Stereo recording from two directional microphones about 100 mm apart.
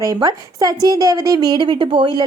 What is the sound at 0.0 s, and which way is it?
A woman's voice, 40° right (ahead or behind).